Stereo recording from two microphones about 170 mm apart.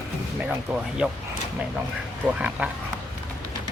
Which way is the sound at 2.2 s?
5° right (ahead or behind).